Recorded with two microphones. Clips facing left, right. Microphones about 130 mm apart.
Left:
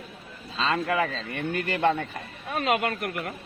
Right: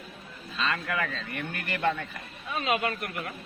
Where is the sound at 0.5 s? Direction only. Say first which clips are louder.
Left 5 dB; 25° left (ahead or behind).